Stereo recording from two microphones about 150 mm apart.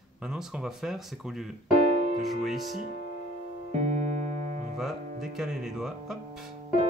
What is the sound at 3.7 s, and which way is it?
Music, 55° right (ahead or behind).